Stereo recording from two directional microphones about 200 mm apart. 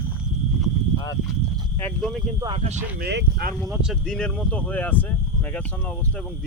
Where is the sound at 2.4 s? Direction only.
30° right (ahead or behind).